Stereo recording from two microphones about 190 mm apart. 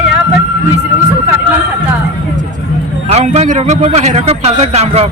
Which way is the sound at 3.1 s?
35° right (ahead or behind).